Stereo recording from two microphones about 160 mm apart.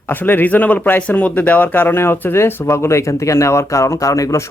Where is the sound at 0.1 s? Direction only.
10° left (ahead or behind).